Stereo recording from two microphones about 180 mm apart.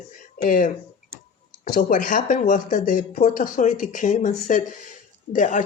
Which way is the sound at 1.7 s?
45° left (ahead or behind).